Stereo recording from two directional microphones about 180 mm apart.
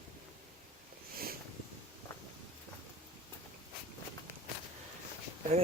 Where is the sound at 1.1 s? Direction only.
55° right (ahead or behind).